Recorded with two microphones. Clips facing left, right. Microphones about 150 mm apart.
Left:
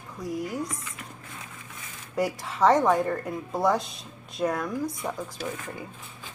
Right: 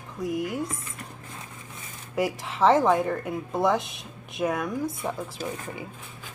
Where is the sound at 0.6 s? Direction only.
30° right (ahead or behind).